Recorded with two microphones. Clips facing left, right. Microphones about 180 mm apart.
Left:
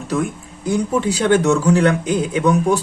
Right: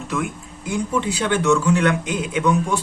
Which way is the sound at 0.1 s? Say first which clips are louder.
Left 5 dB; 35° left (ahead or behind).